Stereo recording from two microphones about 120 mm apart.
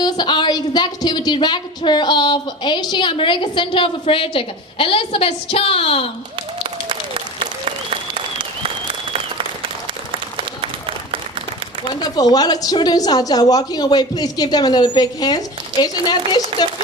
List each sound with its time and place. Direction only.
0.0 s a woman's voice: 40° left (ahead or behind)
6.6 s applause: 55° right (ahead or behind)
10.6 s applause: 50° right (ahead or behind)
11.9 s a woman's voice: 35° left (ahead or behind)